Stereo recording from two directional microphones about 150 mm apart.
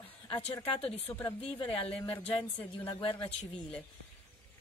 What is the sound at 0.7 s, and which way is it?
Speech, 40° left (ahead or behind).